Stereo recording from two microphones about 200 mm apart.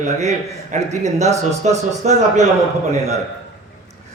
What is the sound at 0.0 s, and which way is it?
Speech, 35° right (ahead or behind).